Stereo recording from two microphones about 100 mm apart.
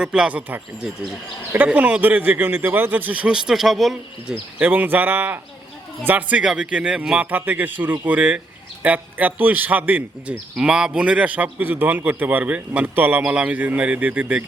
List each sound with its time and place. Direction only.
0.0 s a man's voice: 10° right (ahead or behind)
4.6 s a man's voice: 15° right (ahead or behind)